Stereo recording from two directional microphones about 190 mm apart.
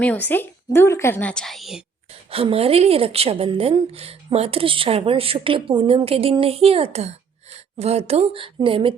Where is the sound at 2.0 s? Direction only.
30° right (ahead or behind).